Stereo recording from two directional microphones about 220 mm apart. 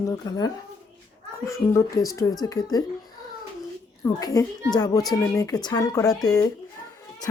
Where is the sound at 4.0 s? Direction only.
15° left (ahead or behind).